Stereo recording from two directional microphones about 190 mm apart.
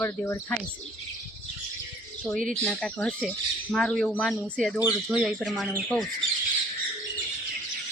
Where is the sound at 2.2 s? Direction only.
Centre (ahead or behind).